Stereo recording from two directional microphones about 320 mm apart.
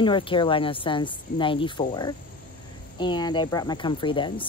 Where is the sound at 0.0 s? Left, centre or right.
Centre.